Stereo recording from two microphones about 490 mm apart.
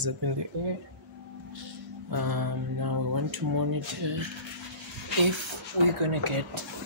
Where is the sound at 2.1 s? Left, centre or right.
Right.